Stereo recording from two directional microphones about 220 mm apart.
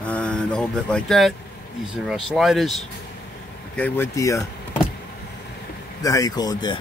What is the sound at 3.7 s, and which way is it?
Speech, 10° left (ahead or behind).